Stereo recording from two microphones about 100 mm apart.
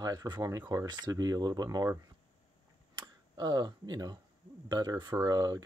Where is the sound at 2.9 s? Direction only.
45° right (ahead or behind).